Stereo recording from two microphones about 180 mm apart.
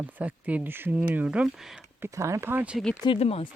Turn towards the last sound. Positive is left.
turn(degrees=35)  # may be behind; listen again after turning